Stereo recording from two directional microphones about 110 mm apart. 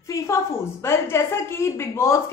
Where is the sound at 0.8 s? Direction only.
25° left (ahead or behind).